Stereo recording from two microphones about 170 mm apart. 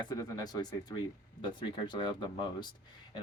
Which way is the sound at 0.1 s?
20° left (ahead or behind).